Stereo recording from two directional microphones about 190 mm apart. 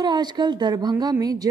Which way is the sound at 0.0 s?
20° right (ahead or behind).